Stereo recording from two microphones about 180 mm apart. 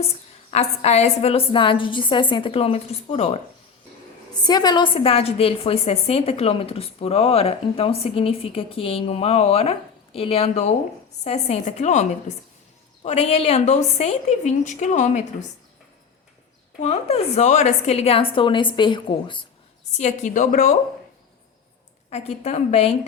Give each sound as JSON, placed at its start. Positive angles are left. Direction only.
{"t": 0.5, "sound": "a woman's voice", "side_deg": 35}
{"t": 4.4, "sound": "a woman's voice", "side_deg": 25}
{"t": 16.8, "sound": "a woman's voice", "side_deg": 35}
{"t": 19.9, "sound": "a woman's voice", "side_deg": 40}
{"t": 22.1, "sound": "a woman's voice", "side_deg": 35}